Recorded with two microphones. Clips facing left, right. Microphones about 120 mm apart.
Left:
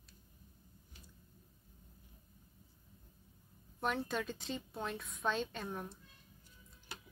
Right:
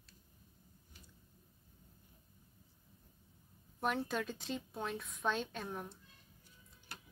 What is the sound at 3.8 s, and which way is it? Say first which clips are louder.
A woman's voice: even; centre (ahead or behind).